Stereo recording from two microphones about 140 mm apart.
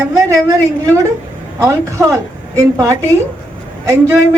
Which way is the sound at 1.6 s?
20° right (ahead or behind).